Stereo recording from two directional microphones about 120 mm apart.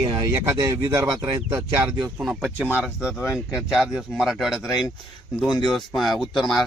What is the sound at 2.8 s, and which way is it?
Speech, 5° right (ahead or behind).